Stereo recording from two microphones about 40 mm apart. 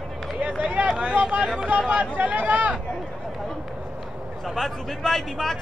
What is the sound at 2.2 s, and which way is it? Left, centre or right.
Speech, right.